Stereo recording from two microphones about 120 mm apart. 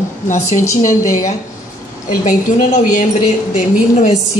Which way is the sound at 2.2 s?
90° left.